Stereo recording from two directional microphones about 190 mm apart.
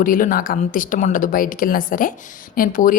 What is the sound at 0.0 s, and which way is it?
A woman's voice, 45° left (ahead or behind).